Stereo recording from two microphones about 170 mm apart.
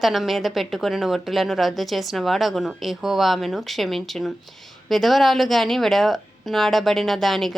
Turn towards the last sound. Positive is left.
turn(degrees=0)  # may be behind; listen again after turning